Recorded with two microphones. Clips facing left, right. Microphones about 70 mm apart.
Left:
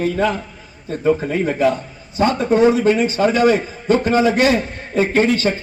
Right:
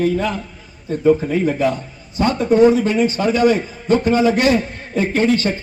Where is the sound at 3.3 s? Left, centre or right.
Left.